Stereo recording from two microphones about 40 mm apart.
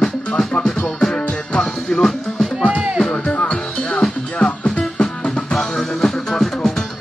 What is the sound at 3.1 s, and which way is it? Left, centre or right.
Music, left.